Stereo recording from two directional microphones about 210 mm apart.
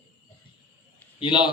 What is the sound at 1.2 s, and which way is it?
Speech, 25° left (ahead or behind).